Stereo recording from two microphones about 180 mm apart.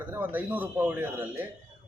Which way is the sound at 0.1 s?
10° right (ahead or behind).